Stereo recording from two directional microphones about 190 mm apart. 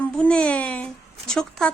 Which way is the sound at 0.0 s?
5° left (ahead or behind).